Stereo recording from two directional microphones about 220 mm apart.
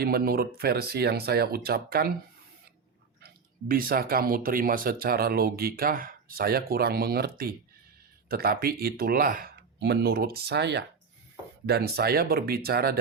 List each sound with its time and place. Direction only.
0.0 s speech: 45° right (ahead or behind)
3.2 s speech: 45° right (ahead or behind)